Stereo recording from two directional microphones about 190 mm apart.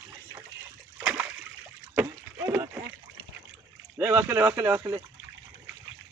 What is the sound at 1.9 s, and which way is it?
Rowboat, 10° right (ahead or behind).